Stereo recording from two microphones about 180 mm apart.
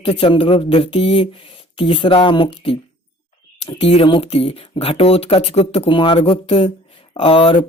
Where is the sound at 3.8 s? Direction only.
30° left (ahead or behind).